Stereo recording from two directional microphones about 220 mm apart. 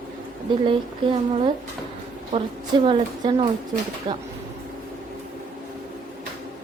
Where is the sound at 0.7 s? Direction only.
25° right (ahead or behind).